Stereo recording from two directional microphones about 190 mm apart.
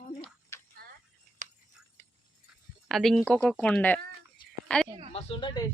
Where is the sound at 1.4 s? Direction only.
40° right (ahead or behind).